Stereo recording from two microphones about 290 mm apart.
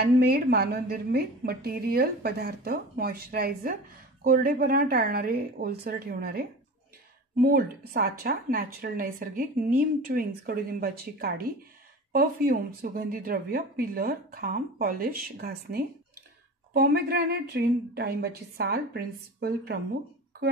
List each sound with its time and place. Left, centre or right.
0.0 s a woman's voice: right